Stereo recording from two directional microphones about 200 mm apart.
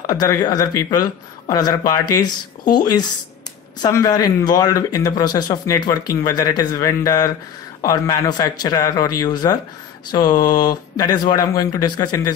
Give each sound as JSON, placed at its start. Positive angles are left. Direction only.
{"t": 0.0, "sound": "a man's voice", "side_deg": 20}
{"t": 3.8, "sound": "a man's voice", "side_deg": 20}